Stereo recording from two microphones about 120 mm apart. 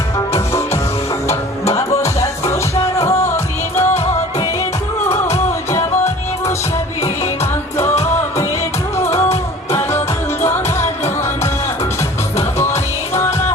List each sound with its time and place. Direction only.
0.3 s music: 25° left (ahead or behind)
5.0 s music: 25° left (ahead or behind)
9.0 s music: 20° left (ahead or behind)
12.5 s music: 20° left (ahead or behind)